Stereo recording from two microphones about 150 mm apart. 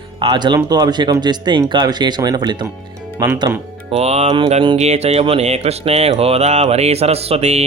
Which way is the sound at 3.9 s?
45° right (ahead or behind).